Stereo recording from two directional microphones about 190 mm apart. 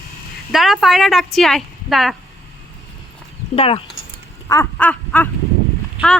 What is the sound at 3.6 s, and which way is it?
Speech, 30° left (ahead or behind).